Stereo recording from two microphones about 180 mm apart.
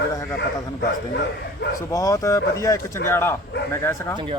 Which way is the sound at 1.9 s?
15° left (ahead or behind).